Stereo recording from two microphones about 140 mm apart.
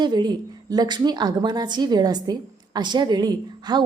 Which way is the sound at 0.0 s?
30° right (ahead or behind).